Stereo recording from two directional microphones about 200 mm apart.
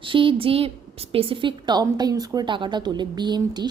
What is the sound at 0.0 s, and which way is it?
A woman's voice, 25° right (ahead or behind).